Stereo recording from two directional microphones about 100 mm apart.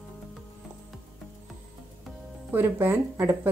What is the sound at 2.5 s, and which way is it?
Speech, 20° right (ahead or behind).